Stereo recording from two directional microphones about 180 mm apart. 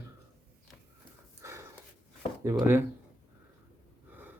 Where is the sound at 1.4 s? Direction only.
15° right (ahead or behind).